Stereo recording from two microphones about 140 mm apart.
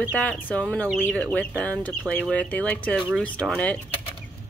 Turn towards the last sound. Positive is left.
turn(degrees=5)  # may be behind; listen again after turning